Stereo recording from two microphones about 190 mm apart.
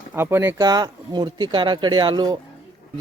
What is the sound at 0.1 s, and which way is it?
Speech, 10° right (ahead or behind).